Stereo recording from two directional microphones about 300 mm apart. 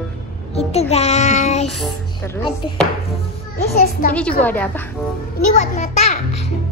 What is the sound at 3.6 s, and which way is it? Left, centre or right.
Child singing, left.